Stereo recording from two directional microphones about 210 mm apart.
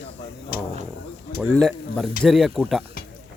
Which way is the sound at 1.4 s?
Centre (ahead or behind).